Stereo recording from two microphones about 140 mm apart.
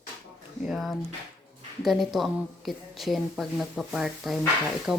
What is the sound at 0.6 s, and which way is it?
A woman's voice, centre (ahead or behind).